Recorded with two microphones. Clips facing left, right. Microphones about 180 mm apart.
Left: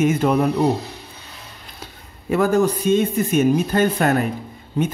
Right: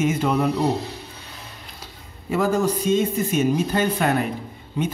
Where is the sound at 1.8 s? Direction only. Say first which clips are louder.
Left 6 dB; 60° left (ahead or behind).